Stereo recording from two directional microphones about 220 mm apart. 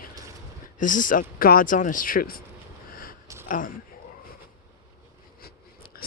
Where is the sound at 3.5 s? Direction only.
40° left (ahead or behind).